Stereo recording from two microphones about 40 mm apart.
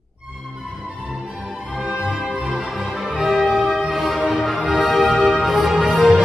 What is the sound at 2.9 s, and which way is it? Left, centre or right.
Music, centre.